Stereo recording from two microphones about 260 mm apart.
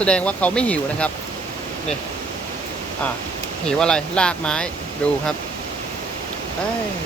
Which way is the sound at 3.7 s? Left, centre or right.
Centre.